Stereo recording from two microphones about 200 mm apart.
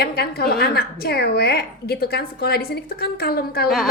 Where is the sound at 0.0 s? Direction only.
50° left (ahead or behind).